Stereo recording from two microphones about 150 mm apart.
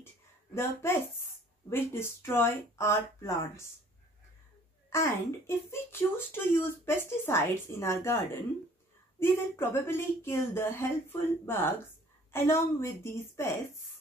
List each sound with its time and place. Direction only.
0.6 s speech: 15° left (ahead or behind)
4.8 s speech: 20° left (ahead or behind)
9.2 s speech: 15° left (ahead or behind)